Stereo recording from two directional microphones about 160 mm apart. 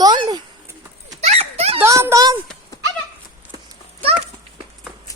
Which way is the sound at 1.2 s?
40° right (ahead or behind).